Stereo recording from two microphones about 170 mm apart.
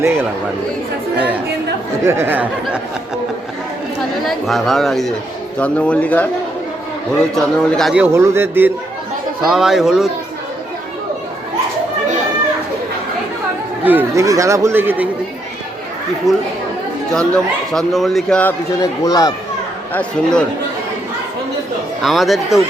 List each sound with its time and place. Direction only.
2.0 s a man's voice: 15° right (ahead or behind)
4.3 s a man's voice: centre (ahead or behind)
7.3 s a man's voice: centre (ahead or behind)
9.4 s speech: centre (ahead or behind)
13.8 s a man's voice: 15° right (ahead or behind)
16.3 s speech: centre (ahead or behind)
18.8 s speech: 20° left (ahead or behind)
19.9 s a man's voice: 10° left (ahead or behind)
22.0 s speech: centre (ahead or behind)